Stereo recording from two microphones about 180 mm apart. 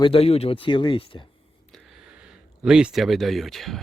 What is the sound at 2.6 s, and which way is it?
Speech, 5° right (ahead or behind).